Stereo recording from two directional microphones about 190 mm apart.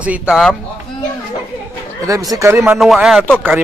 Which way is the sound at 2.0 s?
20° right (ahead or behind).